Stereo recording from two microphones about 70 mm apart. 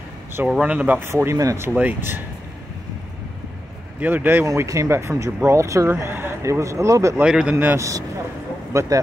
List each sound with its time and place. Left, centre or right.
0.6 s speech: right
1.1 s speech: right
1.7 s speech: right
4.0 s speech: right
4.5 s speech: right
6.4 s speech: right
7.2 s a man's voice: centre
7.5 s speech: right